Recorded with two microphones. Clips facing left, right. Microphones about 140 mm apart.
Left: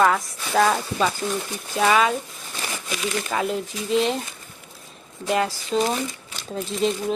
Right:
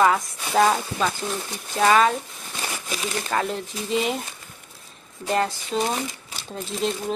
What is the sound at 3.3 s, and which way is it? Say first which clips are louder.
Speech: right 1 dB; centre (ahead or behind).